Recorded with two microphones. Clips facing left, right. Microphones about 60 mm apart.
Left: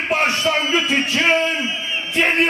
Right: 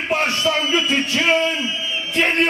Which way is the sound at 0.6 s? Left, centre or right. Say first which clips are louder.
Even; left.